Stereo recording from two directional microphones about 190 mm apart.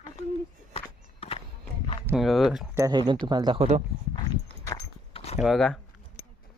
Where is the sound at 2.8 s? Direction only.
20° right (ahead or behind).